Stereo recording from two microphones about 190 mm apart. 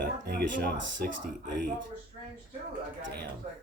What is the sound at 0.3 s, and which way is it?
Speech, 55° right (ahead or behind).